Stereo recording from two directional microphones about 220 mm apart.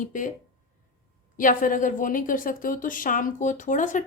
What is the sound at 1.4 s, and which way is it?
Speech, 40° left (ahead or behind).